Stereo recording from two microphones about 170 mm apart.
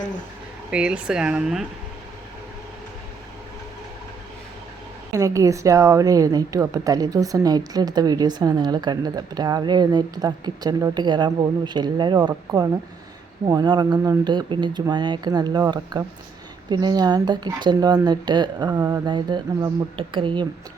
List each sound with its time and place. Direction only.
0.7 s speech: 5° right (ahead or behind)
5.1 s a woman's voice: 20° right (ahead or behind)